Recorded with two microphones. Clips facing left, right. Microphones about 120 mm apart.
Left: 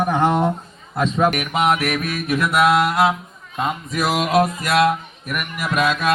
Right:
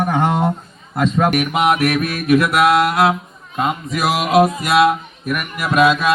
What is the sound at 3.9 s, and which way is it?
Speech, 5° right (ahead or behind).